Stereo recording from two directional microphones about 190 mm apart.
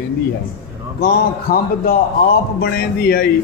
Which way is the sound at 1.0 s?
50° left (ahead or behind).